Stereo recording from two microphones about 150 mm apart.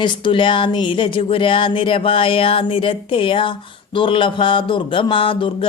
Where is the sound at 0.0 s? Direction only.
30° left (ahead or behind).